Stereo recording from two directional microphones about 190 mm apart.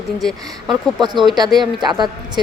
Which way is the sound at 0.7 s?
25° right (ahead or behind).